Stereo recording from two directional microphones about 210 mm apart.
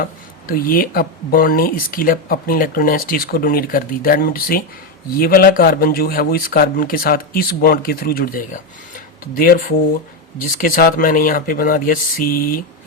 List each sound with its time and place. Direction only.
0.0 s speech: 45° left (ahead or behind)